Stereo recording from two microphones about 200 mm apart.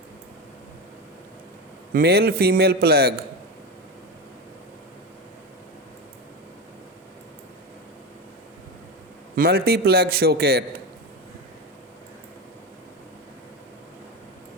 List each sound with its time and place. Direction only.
1.9 s a man's voice: 50° right (ahead or behind)
9.3 s a man's voice: 50° right (ahead or behind)